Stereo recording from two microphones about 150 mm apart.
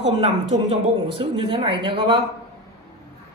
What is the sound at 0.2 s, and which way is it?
Speech, 40° right (ahead or behind).